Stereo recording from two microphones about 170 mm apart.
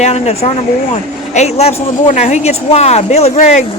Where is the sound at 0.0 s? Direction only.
40° left (ahead or behind).